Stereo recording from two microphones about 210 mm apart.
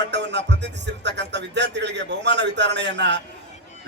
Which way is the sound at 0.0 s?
55° right (ahead or behind).